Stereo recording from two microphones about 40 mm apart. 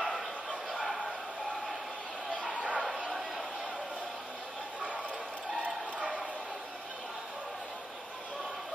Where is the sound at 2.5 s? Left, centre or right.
Right.